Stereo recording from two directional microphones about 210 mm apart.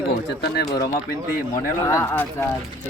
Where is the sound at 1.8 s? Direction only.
10° left (ahead or behind).